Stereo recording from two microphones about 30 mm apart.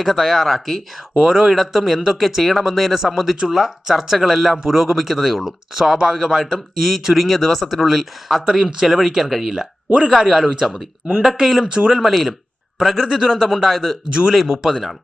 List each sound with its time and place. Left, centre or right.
0.0 s speech: centre
1.2 s speech: centre
1.5 s speech: centre
4.9 s speech: centre
5.2 s speech: centre
7.3 s speech: centre
7.9 s speech: centre
14.1 s speech: right